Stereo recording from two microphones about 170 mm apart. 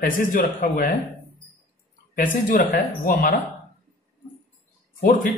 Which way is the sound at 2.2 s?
50° left (ahead or behind).